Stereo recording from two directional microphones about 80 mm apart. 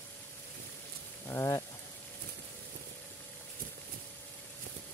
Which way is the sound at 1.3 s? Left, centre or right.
Left.